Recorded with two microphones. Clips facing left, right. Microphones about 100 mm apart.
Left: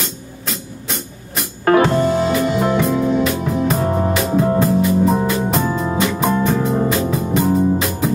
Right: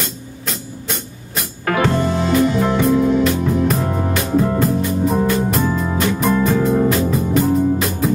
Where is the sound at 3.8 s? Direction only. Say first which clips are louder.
Left 3 dB; 40° left (ahead or behind).